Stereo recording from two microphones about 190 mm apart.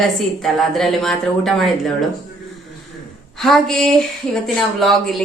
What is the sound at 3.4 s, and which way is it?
A woman's voice, centre (ahead or behind).